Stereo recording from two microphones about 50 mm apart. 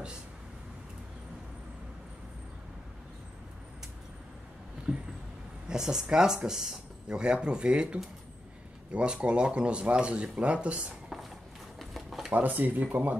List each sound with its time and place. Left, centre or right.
4.9 s speech: centre
11.8 s a sound: centre
12.3 s speech: right